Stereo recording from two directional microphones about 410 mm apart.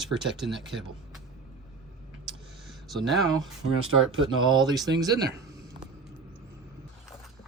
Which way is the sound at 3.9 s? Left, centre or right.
Right.